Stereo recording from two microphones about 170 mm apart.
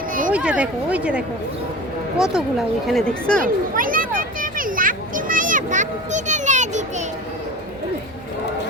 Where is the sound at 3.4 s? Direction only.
55° right (ahead or behind).